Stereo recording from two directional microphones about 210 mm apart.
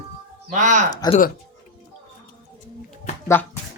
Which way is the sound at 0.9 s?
20° left (ahead or behind).